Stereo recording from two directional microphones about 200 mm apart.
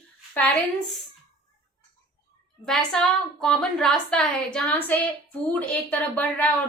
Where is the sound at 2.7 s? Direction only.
Centre (ahead or behind).